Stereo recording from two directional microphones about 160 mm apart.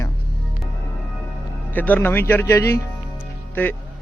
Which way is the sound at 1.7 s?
10° left (ahead or behind).